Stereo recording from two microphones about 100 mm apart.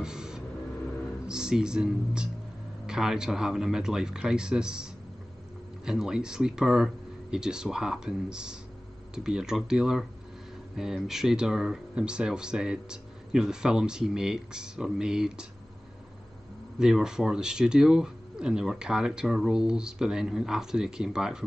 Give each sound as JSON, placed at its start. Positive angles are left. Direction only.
{"t": 0.0, "sound": "a sound", "side_deg": -5}
{"t": 1.2, "sound": "speech", "side_deg": -5}
{"t": 5.9, "sound": "speech", "side_deg": -5}
{"t": 16.7, "sound": "speech", "side_deg": -5}